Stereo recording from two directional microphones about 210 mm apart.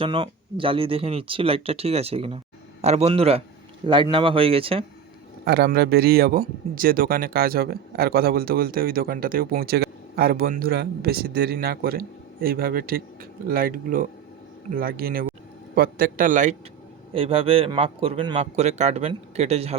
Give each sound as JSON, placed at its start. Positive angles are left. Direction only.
{"t": 0.0, "sound": "a man's voice", "side_deg": -25}
{"t": 5.5, "sound": "a man's voice", "side_deg": -50}
{"t": 17.2, "sound": "a man's voice", "side_deg": -25}